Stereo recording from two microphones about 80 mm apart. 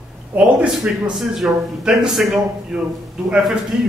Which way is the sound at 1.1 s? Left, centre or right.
Centre.